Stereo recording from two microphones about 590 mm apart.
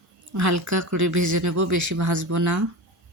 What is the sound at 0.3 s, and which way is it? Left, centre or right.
Speech, right.